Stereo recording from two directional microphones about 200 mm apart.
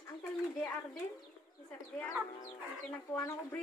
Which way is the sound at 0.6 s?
5° left (ahead or behind).